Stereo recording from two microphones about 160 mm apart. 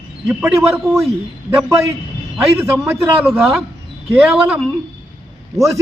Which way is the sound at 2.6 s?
15° right (ahead or behind).